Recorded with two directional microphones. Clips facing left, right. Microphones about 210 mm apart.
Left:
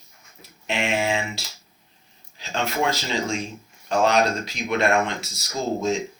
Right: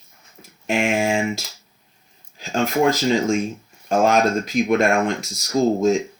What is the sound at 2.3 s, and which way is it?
Speech, 45° right (ahead or behind).